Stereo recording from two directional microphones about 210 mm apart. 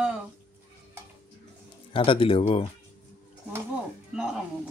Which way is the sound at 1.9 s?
25° left (ahead or behind).